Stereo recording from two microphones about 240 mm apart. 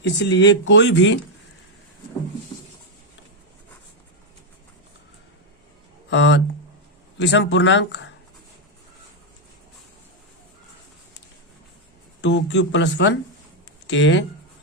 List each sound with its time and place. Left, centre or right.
0.0 s speech: left
6.1 s speech: left
12.2 s speech: left